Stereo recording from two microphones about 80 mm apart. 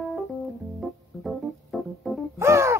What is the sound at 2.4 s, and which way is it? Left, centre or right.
Music, right.